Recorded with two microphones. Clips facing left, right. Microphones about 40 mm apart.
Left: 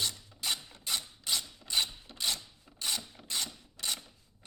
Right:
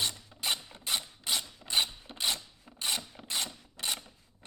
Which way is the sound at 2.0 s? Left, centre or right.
Right.